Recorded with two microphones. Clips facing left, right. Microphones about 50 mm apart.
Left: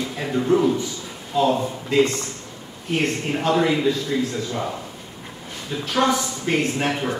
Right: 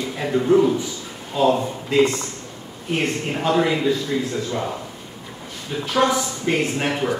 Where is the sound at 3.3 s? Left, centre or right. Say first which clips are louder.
Even; centre.